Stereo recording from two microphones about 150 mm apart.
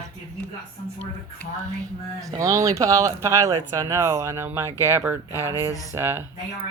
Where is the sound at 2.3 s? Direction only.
20° right (ahead or behind).